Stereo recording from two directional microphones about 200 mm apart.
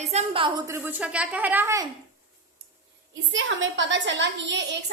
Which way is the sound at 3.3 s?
70° right (ahead or behind).